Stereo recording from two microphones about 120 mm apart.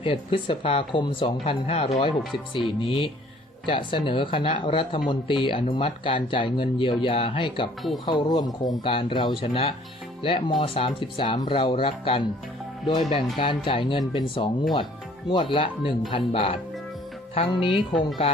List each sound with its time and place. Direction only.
0.0 s speech: 50° left (ahead or behind)